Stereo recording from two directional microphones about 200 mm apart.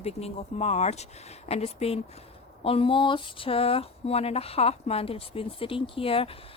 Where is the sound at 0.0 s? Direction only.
30° left (ahead or behind).